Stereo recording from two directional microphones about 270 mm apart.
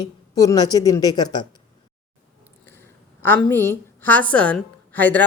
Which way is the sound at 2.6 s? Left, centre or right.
Centre.